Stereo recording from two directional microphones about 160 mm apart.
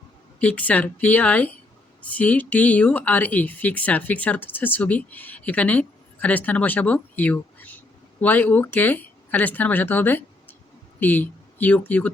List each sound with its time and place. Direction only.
0.3 s speech: 10° left (ahead or behind)